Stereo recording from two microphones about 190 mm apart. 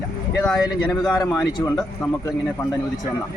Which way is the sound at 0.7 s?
20° left (ahead or behind).